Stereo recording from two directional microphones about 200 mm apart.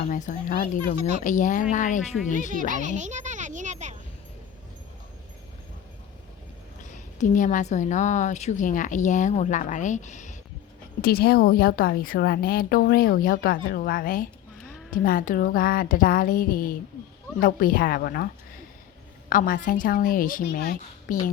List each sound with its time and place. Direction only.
0.1 s a woman's voice: 40° left (ahead or behind)
2.5 s a child's voice: 40° right (ahead or behind)
6.9 s a woman's voice: 40° left (ahead or behind)
11.0 s a woman's voice: 50° left (ahead or behind)
19.3 s a woman's voice: 40° left (ahead or behind)